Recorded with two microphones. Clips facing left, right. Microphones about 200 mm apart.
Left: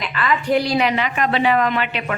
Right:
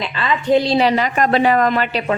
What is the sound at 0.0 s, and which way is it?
A woman's voice, 25° right (ahead or behind).